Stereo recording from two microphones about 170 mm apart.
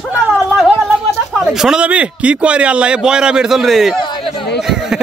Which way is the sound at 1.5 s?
5° right (ahead or behind).